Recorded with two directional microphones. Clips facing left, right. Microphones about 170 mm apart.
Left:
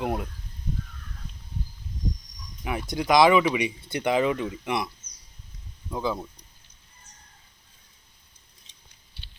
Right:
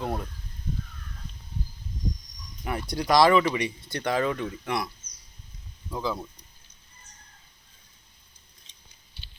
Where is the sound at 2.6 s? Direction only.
5° left (ahead or behind).